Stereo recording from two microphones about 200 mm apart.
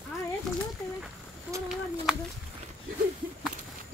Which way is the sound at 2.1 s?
Centre (ahead or behind).